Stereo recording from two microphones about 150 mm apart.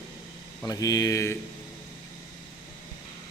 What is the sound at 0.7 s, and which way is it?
Speech, 25° left (ahead or behind).